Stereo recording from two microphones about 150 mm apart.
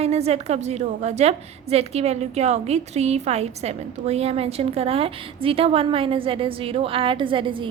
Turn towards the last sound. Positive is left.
turn(degrees=-35)  # may be behind; listen again after turning